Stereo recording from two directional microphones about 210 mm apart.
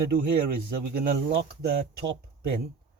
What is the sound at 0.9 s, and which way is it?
Speech, 50° right (ahead or behind).